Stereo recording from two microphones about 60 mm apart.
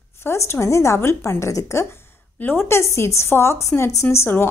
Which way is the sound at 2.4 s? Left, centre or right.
Left.